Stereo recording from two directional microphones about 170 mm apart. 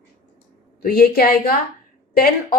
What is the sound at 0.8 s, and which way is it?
Speech, 60° left (ahead or behind).